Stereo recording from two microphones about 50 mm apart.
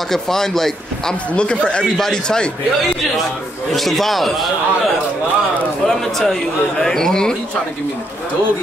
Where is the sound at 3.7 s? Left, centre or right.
Centre.